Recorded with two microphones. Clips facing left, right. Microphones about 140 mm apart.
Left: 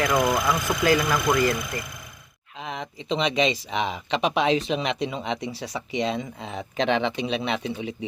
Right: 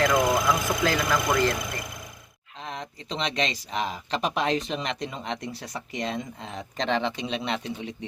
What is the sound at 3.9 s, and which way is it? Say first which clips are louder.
Speech: left 4 dB; 90° left.